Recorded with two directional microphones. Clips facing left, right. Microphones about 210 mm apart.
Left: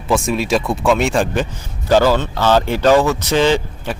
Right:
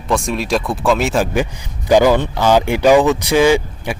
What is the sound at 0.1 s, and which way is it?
Speech, centre (ahead or behind).